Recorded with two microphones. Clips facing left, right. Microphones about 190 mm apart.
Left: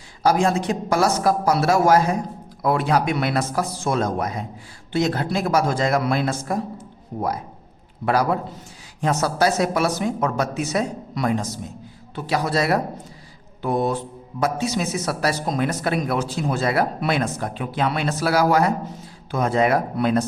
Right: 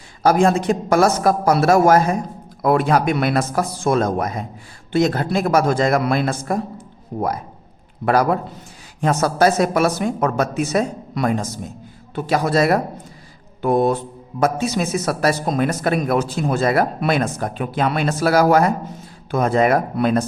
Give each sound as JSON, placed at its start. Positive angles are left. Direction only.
{"t": 0.2, "sound": "speech", "side_deg": -50}
{"t": 8.0, "sound": "a man's voice", "side_deg": -55}